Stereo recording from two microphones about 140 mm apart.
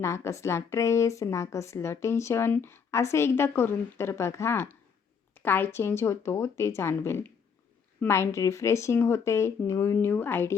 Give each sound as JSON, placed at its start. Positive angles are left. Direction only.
{"t": 0.0, "sound": "a woman's voice", "side_deg": 20}